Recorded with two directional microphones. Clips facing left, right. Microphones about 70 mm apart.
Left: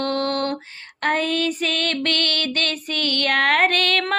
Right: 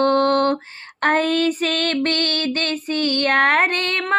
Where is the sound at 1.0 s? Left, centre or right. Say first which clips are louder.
Right 4 dB; right.